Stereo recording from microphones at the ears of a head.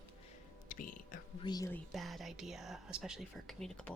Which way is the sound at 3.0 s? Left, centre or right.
Centre.